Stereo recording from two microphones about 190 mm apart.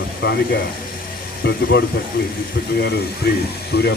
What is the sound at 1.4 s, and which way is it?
Speech, 65° left (ahead or behind).